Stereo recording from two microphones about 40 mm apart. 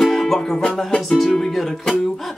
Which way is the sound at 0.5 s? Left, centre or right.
Left.